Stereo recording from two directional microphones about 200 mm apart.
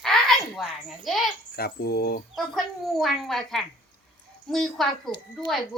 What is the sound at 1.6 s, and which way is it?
Fowl, 50° left (ahead or behind).